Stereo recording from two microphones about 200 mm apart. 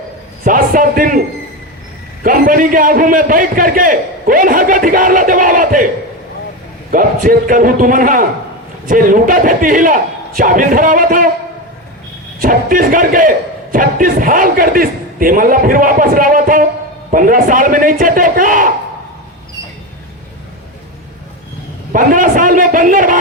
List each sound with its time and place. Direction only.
0.4 s a man's voice: 45° right (ahead or behind)
2.2 s a man's voice: 45° right (ahead or behind)
6.9 s a man's voice: 45° right (ahead or behind)
12.4 s a man's voice: 45° right (ahead or behind)
21.9 s a man's voice: 40° right (ahead or behind)